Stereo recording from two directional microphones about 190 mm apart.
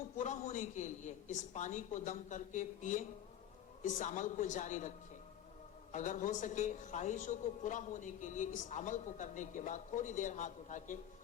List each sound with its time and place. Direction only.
0.2 s a man's voice: 40° left (ahead or behind)
5.9 s a man's voice: 40° left (ahead or behind)